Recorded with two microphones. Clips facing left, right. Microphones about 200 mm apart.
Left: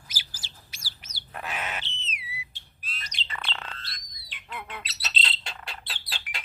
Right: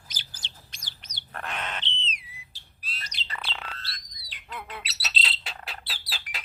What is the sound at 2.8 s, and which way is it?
Bird, 40° right (ahead or behind).